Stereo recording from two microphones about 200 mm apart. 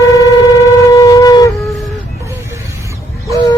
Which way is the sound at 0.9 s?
15° left (ahead or behind).